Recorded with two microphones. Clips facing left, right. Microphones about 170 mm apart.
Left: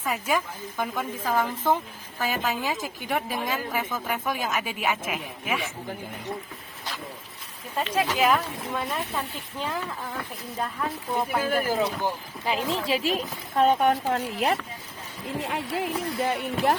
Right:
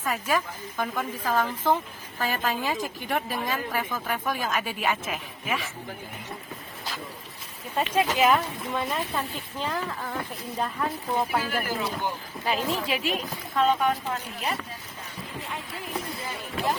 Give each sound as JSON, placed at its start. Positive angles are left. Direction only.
{"t": 0.0, "sound": "speech", "side_deg": 10}
{"t": 7.8, "sound": "speech", "side_deg": 0}
{"t": 9.6, "sound": "speech", "side_deg": 10}
{"t": 10.6, "sound": "speech", "side_deg": 0}
{"t": 11.4, "sound": "speech", "side_deg": 45}
{"t": 12.7, "sound": "speech", "side_deg": 30}
{"t": 13.6, "sound": "speech", "side_deg": 50}